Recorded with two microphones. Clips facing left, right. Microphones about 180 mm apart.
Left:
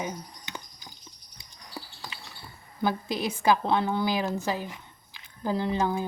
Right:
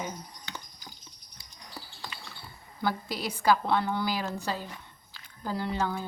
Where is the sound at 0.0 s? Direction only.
15° left (ahead or behind).